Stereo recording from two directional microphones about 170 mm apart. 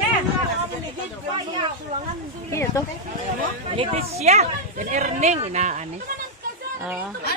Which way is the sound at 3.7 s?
35° right (ahead or behind).